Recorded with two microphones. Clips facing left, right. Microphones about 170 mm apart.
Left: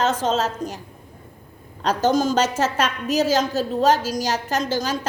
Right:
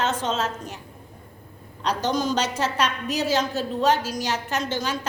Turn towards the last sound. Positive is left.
turn(degrees=40)  # may be behind; listen again after turning